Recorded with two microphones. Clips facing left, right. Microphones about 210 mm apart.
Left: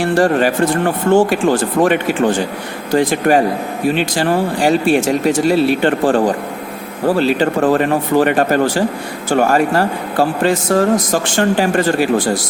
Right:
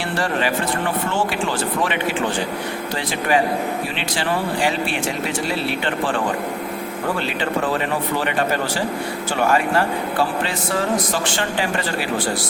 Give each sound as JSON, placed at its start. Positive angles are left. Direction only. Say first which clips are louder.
{"t": 0.0, "sound": "speech", "louder": "left 9 dB", "side_deg": 45}